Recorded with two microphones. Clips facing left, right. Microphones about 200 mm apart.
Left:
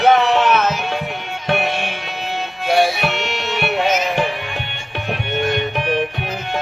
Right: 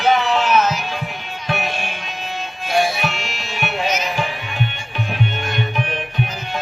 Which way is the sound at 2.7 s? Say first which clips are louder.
Left 3 dB; 65° left (ahead or behind).